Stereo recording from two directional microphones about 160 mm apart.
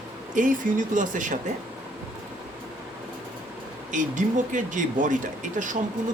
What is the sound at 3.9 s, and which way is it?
Speech, 50° right (ahead or behind).